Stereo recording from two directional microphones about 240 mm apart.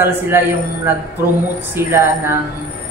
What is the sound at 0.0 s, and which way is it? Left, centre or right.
Speech, centre.